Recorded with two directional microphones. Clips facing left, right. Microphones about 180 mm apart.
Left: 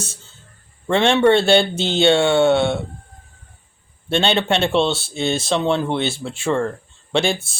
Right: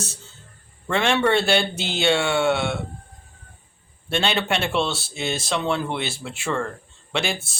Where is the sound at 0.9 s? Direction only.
25° left (ahead or behind).